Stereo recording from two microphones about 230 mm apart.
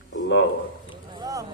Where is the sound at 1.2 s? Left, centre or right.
Centre.